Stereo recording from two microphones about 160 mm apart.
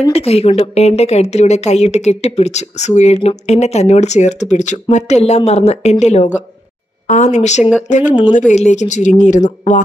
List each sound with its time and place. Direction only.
0.1 s speech: 40° left (ahead or behind)